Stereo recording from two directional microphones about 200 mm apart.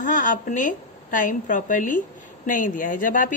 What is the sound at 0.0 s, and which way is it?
A woman's voice, 40° left (ahead or behind).